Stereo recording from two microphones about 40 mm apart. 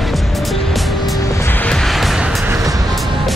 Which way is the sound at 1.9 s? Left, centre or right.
Centre.